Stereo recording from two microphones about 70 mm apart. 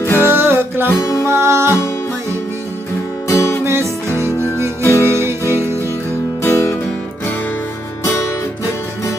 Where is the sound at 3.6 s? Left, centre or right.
Right.